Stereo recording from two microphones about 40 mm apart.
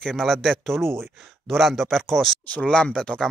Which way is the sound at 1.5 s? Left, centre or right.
Centre.